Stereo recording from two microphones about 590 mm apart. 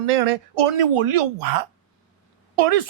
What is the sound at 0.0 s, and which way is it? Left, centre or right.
Speech, right.